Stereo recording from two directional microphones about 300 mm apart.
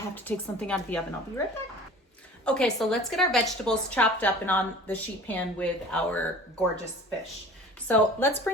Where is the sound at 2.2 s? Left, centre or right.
Centre.